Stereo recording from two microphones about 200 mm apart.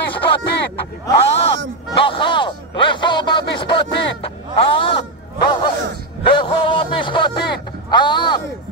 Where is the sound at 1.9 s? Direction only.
25° left (ahead or behind).